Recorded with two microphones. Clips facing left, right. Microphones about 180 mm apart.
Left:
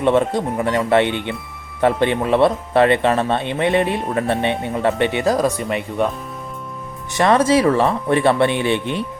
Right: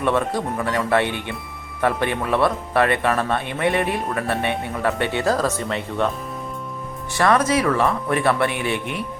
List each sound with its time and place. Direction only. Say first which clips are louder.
0.0 s speech: left 5 dB; 25° left (ahead or behind)
7.1 s speech: left 4 dB; 20° left (ahead or behind)